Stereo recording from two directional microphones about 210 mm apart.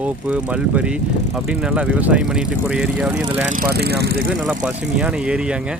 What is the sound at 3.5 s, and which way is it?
Speech, 45° right (ahead or behind).